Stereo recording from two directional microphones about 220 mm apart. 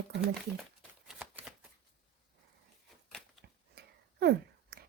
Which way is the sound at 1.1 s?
5° right (ahead or behind).